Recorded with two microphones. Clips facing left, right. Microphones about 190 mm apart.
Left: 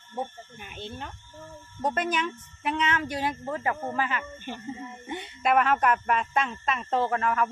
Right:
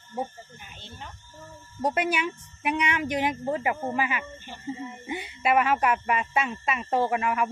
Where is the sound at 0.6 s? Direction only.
60° left (ahead or behind).